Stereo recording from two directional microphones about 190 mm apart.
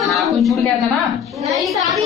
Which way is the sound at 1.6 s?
Centre (ahead or behind).